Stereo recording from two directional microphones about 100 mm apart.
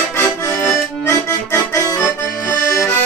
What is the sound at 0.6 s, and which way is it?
Accordion, 25° left (ahead or behind).